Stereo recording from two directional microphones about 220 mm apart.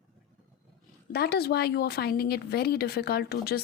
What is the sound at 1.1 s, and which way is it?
A woman's voice, 45° left (ahead or behind).